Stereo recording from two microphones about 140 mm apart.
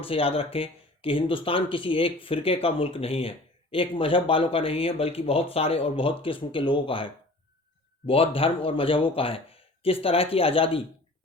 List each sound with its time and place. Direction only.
0.0 s speech: 40° left (ahead or behind)